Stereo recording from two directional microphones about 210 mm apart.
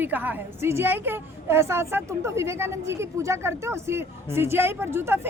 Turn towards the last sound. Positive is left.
turn(degrees=-10)  # may be behind; listen again after turning